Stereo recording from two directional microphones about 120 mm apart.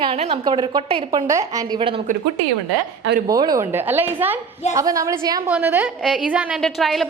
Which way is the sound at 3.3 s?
30° right (ahead or behind).